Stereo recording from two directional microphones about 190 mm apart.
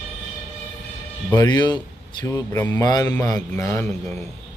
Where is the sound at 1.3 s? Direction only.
20° left (ahead or behind).